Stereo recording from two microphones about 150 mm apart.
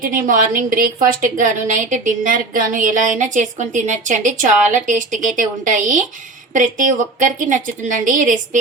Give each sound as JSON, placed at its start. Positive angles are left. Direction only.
{"t": 0.1, "sound": "a woman's voice", "side_deg": -65}